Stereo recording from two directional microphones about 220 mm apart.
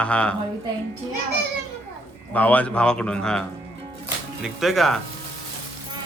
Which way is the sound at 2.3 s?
5° left (ahead or behind).